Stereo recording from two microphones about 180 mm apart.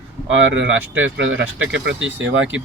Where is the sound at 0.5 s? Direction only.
90° right.